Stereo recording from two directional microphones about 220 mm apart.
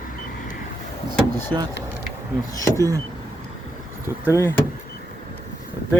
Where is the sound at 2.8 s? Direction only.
15° right (ahead or behind).